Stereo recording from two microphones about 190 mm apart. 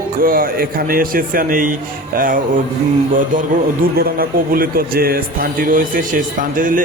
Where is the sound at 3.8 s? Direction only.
50° right (ahead or behind).